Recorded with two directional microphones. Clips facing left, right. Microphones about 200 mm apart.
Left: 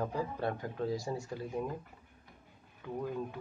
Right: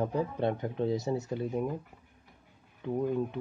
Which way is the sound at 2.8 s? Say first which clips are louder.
Right 7 dB; 20° right (ahead or behind).